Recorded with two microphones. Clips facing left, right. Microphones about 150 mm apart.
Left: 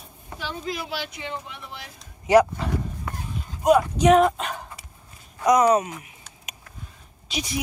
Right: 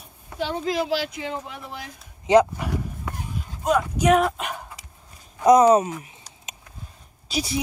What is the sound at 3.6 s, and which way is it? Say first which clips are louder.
Speech: left 4 dB; 15° left (ahead or behind).